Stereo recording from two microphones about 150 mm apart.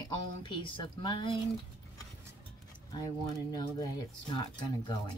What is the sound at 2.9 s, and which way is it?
Speech, 25° left (ahead or behind).